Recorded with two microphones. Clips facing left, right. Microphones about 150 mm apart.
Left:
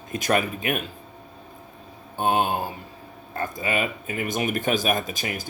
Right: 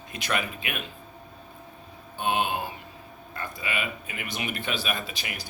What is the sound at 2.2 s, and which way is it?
Speech, 40° left (ahead or behind).